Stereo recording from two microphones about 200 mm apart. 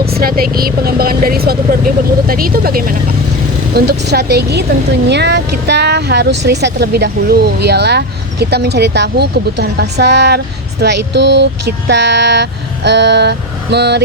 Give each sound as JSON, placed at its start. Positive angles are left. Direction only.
{"t": 0.0, "sound": "speech", "side_deg": -50}